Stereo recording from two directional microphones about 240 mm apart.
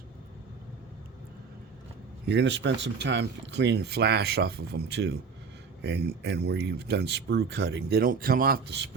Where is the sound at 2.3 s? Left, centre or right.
Right.